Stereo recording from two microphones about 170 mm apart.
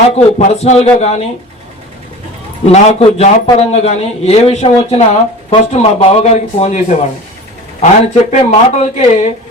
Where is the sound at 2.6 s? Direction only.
40° left (ahead or behind).